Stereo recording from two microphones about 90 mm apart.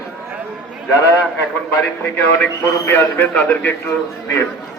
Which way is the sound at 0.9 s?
35° left (ahead or behind).